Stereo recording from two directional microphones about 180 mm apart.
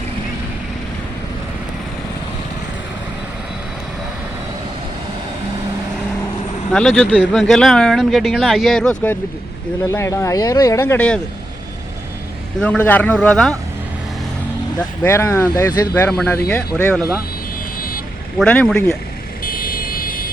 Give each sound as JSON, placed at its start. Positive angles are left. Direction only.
{"t": 6.7, "sound": "speech", "side_deg": 5}
{"t": 9.8, "sound": "speech", "side_deg": 15}
{"t": 12.5, "sound": "speech", "side_deg": 5}
{"t": 15.0, "sound": "speech", "side_deg": 15}
{"t": 17.7, "sound": "vehicle", "side_deg": 55}
{"t": 18.3, "sound": "speech", "side_deg": 5}
{"t": 19.5, "sound": "vehicle", "side_deg": 55}